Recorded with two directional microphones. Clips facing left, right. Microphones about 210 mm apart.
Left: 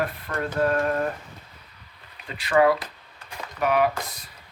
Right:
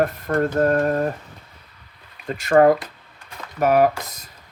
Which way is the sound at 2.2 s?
45° right (ahead or behind).